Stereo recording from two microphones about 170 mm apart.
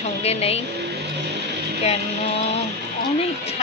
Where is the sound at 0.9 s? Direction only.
85° right.